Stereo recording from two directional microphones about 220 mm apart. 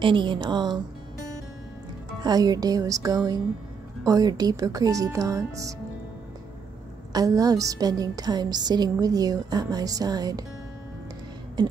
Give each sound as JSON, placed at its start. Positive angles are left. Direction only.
{"t": 0.0, "sound": "a woman's voice", "side_deg": -20}
{"t": 2.2, "sound": "a woman's voice", "side_deg": -15}
{"t": 7.1, "sound": "a woman's voice", "side_deg": -15}
{"t": 11.6, "sound": "beatboxing", "side_deg": -20}